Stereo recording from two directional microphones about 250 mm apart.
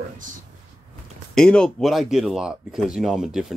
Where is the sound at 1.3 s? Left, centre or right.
Centre.